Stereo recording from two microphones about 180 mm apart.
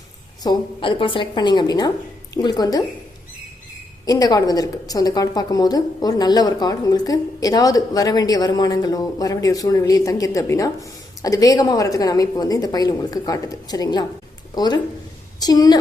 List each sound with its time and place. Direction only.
0.4 s a woman's voice: 30° left (ahead or behind)
4.0 s a woman's voice: 20° left (ahead or behind)